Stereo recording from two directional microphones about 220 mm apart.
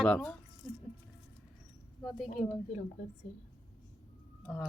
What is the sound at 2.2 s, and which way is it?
Speech, 30° left (ahead or behind).